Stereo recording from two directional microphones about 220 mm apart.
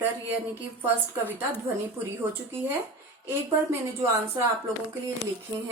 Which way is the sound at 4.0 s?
10° right (ahead or behind).